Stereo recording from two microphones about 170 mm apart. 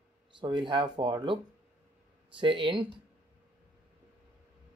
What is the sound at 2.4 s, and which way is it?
Speech, 30° right (ahead or behind).